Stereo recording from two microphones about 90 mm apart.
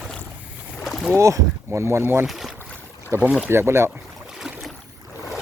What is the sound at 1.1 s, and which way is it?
Speech, 35° right (ahead or behind).